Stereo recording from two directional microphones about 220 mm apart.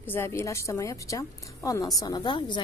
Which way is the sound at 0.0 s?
10° left (ahead or behind).